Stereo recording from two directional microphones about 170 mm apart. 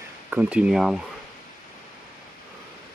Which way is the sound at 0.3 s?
10° right (ahead or behind).